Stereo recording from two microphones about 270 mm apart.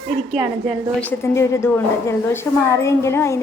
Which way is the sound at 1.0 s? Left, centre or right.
Centre.